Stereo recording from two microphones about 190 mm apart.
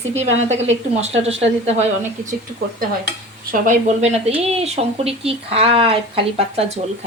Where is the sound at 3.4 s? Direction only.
40° right (ahead or behind).